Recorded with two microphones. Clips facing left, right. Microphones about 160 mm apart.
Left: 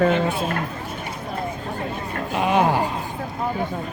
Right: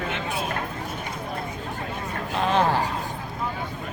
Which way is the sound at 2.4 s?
10° left (ahead or behind).